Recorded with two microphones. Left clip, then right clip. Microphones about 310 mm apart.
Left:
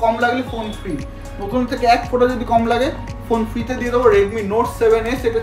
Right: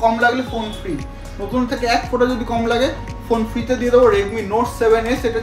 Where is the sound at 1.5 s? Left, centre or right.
Centre.